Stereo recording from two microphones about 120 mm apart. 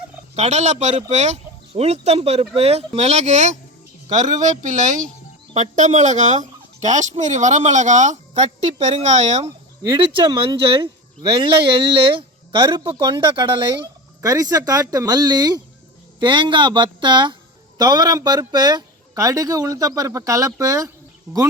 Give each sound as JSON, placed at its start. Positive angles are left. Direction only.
{"t": 0.3, "sound": "speech", "side_deg": -70}
{"t": 4.1, "sound": "speech", "side_deg": -90}
{"t": 9.0, "sound": "speech", "side_deg": -60}
{"t": 9.8, "sound": "speech", "side_deg": -40}
{"t": 14.2, "sound": "speech", "side_deg": -30}